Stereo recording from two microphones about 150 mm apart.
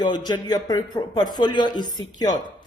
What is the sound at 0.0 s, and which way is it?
Speech, 30° left (ahead or behind).